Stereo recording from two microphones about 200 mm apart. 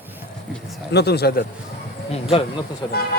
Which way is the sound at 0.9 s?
55° left (ahead or behind).